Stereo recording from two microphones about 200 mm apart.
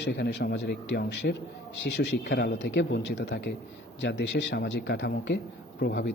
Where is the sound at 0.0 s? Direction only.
60° left (ahead or behind).